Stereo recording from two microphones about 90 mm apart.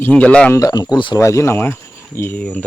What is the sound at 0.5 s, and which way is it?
Speech, 40° left (ahead or behind).